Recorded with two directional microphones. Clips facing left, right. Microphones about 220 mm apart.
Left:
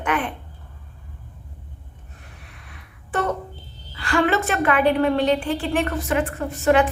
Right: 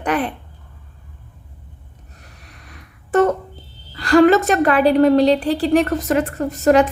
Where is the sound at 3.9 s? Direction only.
40° right (ahead or behind).